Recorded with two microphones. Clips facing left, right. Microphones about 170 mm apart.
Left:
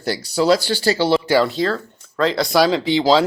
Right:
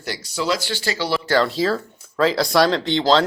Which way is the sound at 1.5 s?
5° right (ahead or behind).